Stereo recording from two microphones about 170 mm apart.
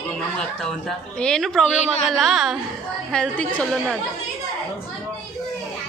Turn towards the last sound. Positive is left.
turn(degrees=0)  # may be behind; listen again after turning